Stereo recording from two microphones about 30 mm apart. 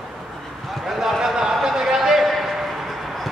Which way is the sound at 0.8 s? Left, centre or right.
Centre.